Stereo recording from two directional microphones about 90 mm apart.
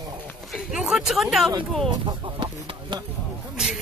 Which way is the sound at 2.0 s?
60° right (ahead or behind).